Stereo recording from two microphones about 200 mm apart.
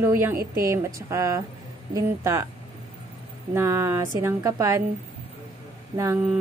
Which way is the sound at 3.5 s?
10° right (ahead or behind).